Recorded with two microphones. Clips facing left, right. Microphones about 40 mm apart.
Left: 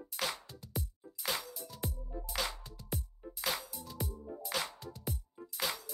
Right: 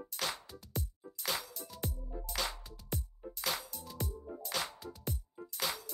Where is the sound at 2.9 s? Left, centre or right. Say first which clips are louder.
Even; centre.